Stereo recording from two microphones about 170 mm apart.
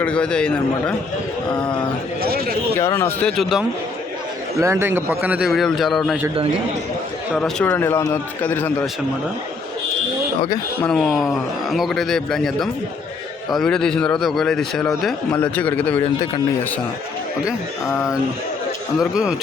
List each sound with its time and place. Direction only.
0.0 s a man's voice: 5° left (ahead or behind)
2.2 s speech: 65° right (ahead or behind)
2.7 s a man's voice: 15° left (ahead or behind)
4.6 s a man's voice: 15° right (ahead or behind); by 6.1 s centre (ahead or behind)
7.3 s a man's voice: 10° left (ahead or behind)
10.8 s a man's voice: 5° left (ahead or behind)
17.8 s a man's voice: 15° left (ahead or behind)
19.1 s a man's voice: 5° right (ahead or behind)